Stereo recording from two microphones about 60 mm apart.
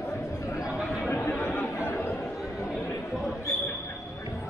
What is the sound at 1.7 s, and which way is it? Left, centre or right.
Chatter, left.